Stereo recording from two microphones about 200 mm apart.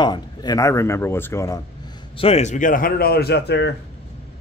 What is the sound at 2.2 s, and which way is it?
Speech, 30° left (ahead or behind).